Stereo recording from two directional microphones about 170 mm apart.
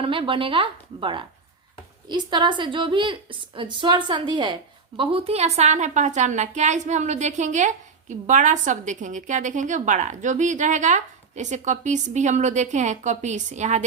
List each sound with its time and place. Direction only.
0.0 s a woman's voice: 30° right (ahead or behind)